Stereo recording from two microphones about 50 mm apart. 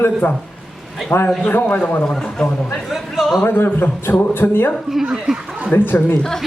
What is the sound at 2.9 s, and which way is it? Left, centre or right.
Speech, centre.